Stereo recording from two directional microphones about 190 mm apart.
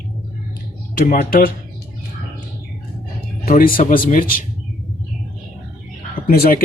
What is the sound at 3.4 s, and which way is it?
Speech, 50° left (ahead or behind).